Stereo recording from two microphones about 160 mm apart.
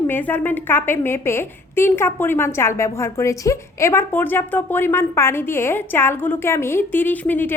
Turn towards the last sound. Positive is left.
turn(degrees=10)  # may be behind; listen again after turning